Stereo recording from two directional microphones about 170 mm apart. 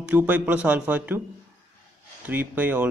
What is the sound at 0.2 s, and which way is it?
A man's voice, 10° right (ahead or behind).